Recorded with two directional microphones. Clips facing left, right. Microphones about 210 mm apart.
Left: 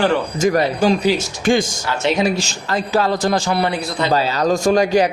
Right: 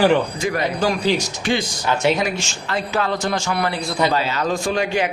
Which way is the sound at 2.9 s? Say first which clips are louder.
Left 5 dB; 35° left (ahead or behind).